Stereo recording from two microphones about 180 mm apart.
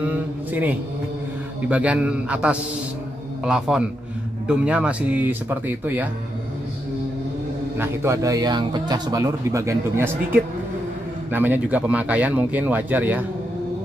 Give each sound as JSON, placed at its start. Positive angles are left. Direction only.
{"t": 0.0, "sound": "a man's voice", "side_deg": -10}
{"t": 7.7, "sound": "speech", "side_deg": -15}